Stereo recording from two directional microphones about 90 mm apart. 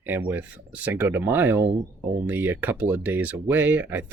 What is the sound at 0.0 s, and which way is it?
Speech, 20° right (ahead or behind).